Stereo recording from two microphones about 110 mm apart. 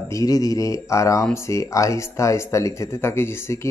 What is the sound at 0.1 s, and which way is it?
Speech, 35° left (ahead or behind).